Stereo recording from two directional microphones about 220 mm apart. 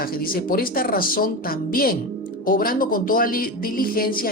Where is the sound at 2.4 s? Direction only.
40° left (ahead or behind).